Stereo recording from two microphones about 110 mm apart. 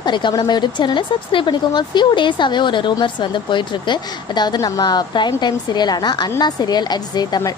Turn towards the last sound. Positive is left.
turn(degrees=40)  # may be behind; listen again after turning